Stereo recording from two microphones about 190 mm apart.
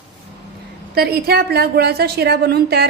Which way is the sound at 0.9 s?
55° right (ahead or behind).